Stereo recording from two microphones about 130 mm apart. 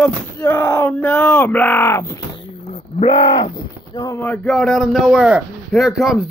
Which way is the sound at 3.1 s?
35° left (ahead or behind).